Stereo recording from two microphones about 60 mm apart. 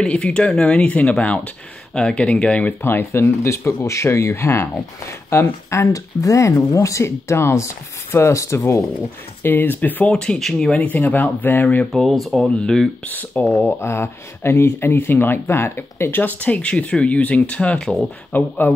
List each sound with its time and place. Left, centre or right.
0.0 s speech: centre
2.8 s speech: left
5.9 s speech: left
9.4 s speech: left
10.1 s speech: centre
10.8 s speech: left
11.9 s speech: centre
12.4 s speech: centre
13.0 s speech: left
18.3 s speech: left